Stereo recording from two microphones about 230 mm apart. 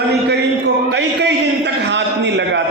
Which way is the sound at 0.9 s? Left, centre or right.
Right.